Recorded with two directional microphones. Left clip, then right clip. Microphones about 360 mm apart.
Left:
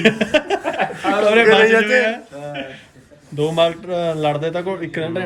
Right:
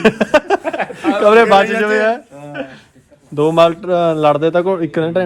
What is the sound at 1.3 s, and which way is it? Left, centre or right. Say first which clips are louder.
Speech: right 1 dB; right.